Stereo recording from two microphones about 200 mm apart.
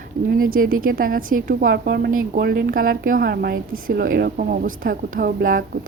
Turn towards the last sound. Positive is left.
turn(degrees=-45)  # may be behind; listen again after turning